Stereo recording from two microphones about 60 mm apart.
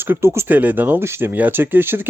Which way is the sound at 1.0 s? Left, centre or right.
Right.